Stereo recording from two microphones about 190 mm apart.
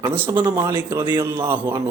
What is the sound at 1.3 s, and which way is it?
Speech, 10° right (ahead or behind).